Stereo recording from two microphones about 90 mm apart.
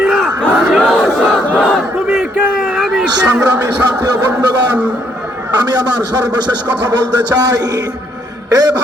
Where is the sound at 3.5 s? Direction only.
25° right (ahead or behind).